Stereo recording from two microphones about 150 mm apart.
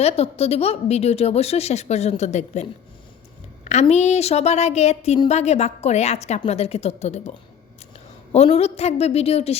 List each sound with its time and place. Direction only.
0.0 s a woman's voice: 45° left (ahead or behind)